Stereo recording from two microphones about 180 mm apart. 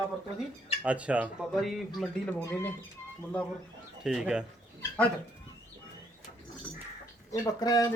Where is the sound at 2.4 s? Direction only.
15° left (ahead or behind).